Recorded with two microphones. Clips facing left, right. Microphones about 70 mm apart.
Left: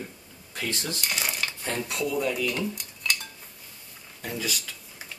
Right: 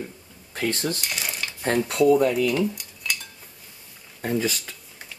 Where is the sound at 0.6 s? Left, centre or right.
Right.